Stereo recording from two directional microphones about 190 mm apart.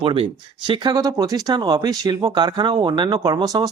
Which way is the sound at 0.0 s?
30° right (ahead or behind).